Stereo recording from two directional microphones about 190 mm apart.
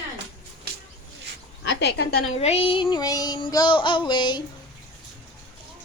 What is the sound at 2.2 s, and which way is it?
Speech, 35° left (ahead or behind).